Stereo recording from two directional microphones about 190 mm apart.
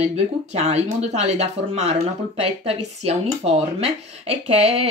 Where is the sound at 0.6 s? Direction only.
35° right (ahead or behind).